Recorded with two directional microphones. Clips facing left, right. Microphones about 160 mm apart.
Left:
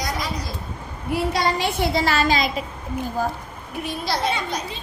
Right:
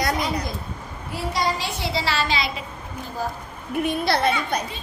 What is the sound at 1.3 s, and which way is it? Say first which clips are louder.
A woman's voice: even; 60° left (ahead or behind).